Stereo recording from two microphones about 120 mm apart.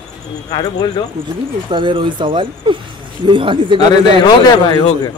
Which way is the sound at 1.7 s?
45° right (ahead or behind).